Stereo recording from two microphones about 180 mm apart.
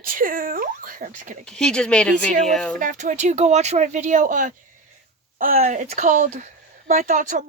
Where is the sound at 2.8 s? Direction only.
45° right (ahead or behind).